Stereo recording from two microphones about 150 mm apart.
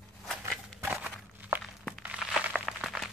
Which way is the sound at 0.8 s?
15° right (ahead or behind).